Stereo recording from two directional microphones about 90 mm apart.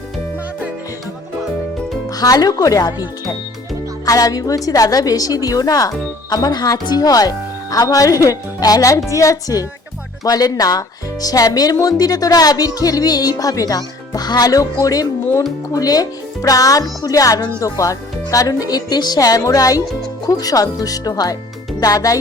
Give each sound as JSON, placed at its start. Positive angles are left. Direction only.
{"t": 2.0, "sound": "speech", "side_deg": 45}
{"t": 4.0, "sound": "speech", "side_deg": 40}